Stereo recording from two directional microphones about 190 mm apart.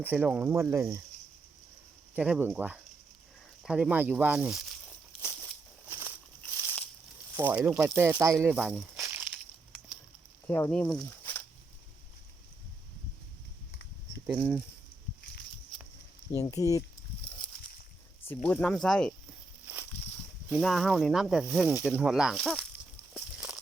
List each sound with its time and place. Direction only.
0.0 s speech: 10° right (ahead or behind)
2.1 s speech: 5° right (ahead or behind)
5.9 s a sound: 10° right (ahead or behind)
7.3 s speech: 10° right (ahead or behind)
8.4 s speech: 5° right (ahead or behind)
8.8 s a sound: 10° right (ahead or behind)
10.4 s speech: 10° left (ahead or behind)
14.3 s speech: 5° right (ahead or behind)
16.3 s speech: 20° left (ahead or behind)
18.3 s speech: 5° left (ahead or behind)
19.6 s snake: 10° right (ahead or behind)
20.5 s speech: centre (ahead or behind)